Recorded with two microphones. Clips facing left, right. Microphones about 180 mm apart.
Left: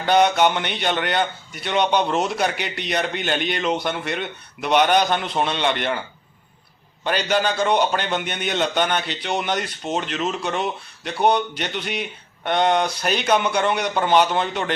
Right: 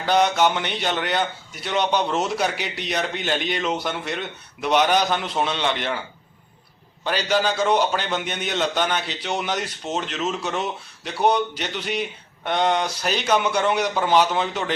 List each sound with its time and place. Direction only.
0.0 s a man's voice: centre (ahead or behind)
7.0 s a man's voice: centre (ahead or behind)